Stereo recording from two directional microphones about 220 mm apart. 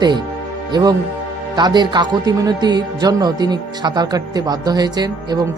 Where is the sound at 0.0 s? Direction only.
20° right (ahead or behind).